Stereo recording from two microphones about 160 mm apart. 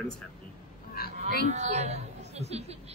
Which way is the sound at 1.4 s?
45° right (ahead or behind).